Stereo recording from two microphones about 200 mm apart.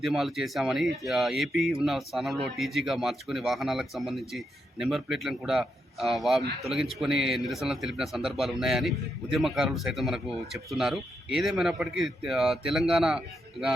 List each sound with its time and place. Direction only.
0.0 s speech: centre (ahead or behind)